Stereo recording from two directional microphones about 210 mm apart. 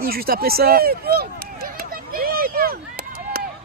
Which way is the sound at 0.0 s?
45° right (ahead or behind).